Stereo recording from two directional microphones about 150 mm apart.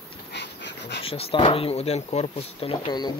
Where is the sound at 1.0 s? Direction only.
40° left (ahead or behind).